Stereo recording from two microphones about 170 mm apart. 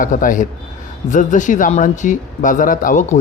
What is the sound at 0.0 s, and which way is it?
Speech, 50° left (ahead or behind).